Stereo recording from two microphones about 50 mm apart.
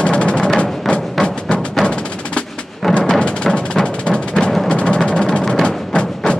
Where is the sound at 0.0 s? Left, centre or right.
Left.